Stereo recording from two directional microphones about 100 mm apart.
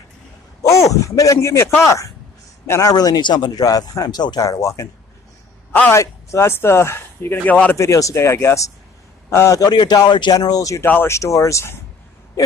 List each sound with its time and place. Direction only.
0.6 s a sound: 35° left (ahead or behind)
1.9 s speech: 30° left (ahead or behind)
5.9 s speech: 30° left (ahead or behind)
7.7 s speech: 30° left (ahead or behind)